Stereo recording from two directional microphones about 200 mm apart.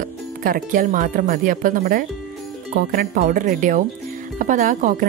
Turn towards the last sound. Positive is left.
turn(degrees=-40)  # may be behind; listen again after turning